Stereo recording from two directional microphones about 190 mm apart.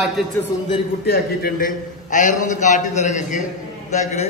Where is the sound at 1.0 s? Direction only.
55° left (ahead or behind).